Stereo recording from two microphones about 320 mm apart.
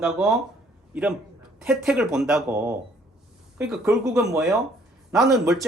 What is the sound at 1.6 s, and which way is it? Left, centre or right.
Speech, centre.